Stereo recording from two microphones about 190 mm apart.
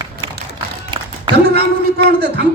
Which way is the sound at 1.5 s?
60° right (ahead or behind).